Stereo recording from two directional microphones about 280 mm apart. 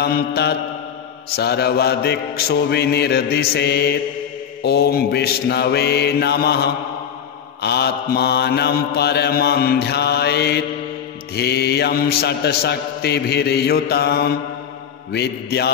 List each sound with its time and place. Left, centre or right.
0.0 s mantra: left